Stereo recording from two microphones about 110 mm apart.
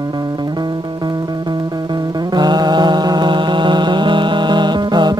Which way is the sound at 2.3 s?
40° right (ahead or behind).